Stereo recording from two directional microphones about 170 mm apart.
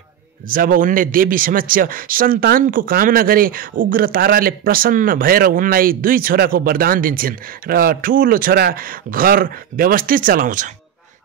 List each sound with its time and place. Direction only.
0.5 s a man's voice: 55° right (ahead or behind)